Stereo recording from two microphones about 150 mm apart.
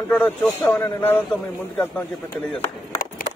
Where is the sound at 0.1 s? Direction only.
15° left (ahead or behind).